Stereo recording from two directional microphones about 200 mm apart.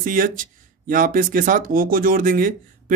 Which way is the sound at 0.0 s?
45° right (ahead or behind).